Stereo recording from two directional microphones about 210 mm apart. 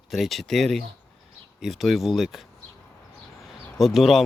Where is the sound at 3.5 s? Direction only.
Centre (ahead or behind).